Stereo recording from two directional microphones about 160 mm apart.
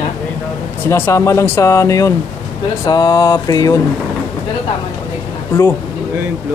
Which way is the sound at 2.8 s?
25° left (ahead or behind).